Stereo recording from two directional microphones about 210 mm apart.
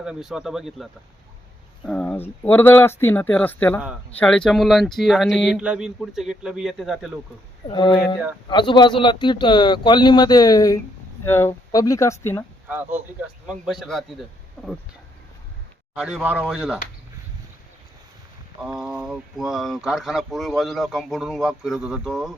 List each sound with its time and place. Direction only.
0.0 s speech: 5° right (ahead or behind)
7.7 s speech: 20° left (ahead or behind)
12.6 s speech: 10° right (ahead or behind)
16.0 s speech: 5° right (ahead or behind)
18.6 s speech: 5° right (ahead or behind)